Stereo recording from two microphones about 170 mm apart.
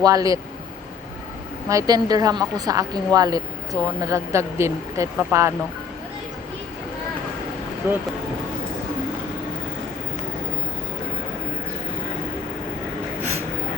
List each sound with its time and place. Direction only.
0.0 s a woman's voice: 20° right (ahead or behind)
1.7 s a woman's voice: 20° right (ahead or behind)